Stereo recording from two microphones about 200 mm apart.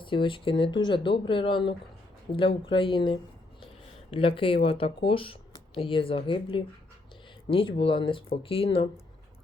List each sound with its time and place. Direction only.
0.0 s speech: 25° left (ahead or behind)